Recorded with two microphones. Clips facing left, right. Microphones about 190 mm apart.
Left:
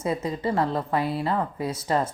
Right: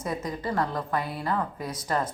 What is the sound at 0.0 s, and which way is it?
Speech, 25° left (ahead or behind).